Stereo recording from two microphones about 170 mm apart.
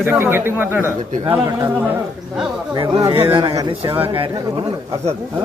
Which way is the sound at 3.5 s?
20° right (ahead or behind).